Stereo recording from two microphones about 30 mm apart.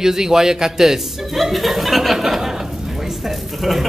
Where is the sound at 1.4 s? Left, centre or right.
Centre.